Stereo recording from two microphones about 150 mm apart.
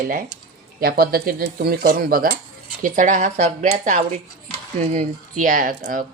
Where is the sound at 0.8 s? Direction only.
85° right.